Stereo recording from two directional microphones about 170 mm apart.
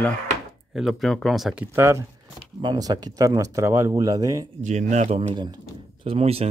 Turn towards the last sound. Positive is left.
turn(degrees=-35)  # may be behind; listen again after turning